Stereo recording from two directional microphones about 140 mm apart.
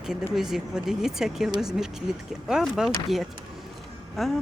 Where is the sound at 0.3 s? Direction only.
Centre (ahead or behind).